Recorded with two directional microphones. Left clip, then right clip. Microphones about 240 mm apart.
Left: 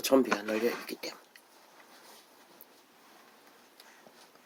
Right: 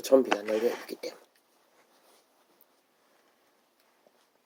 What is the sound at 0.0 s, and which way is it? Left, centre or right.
Speech, left.